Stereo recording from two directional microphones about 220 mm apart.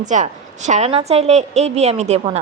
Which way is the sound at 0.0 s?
35° right (ahead or behind).